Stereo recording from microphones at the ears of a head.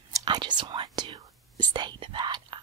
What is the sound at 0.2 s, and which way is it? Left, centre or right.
Speech, right.